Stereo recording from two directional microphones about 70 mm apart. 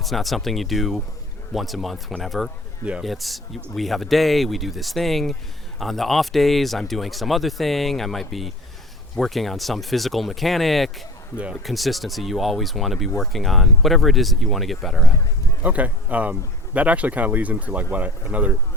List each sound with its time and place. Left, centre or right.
0.0 s speech: centre
15.6 s speech: right